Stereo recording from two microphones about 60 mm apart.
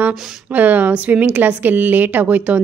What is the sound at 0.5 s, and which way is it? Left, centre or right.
Speech, right.